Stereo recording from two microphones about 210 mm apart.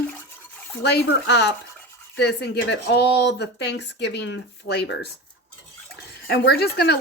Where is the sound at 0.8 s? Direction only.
55° left (ahead or behind).